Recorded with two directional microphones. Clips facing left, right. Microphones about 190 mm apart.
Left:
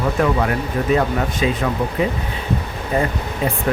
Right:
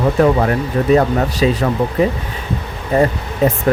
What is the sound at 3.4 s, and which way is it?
Speech, 45° right (ahead or behind).